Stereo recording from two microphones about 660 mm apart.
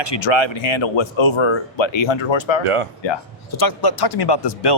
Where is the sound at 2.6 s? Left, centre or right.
Right.